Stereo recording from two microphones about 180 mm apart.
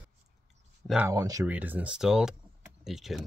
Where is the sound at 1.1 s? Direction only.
20° right (ahead or behind).